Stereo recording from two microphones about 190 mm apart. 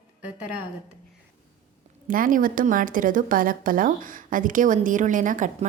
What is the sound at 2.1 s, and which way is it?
A woman's voice, 45° right (ahead or behind).